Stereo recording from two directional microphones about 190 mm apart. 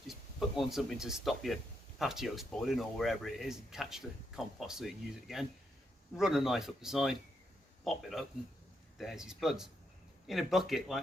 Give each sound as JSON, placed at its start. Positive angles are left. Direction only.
{"t": 0.1, "sound": "speech", "side_deg": 0}